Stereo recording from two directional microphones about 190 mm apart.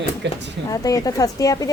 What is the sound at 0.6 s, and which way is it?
Speech, 20° left (ahead or behind).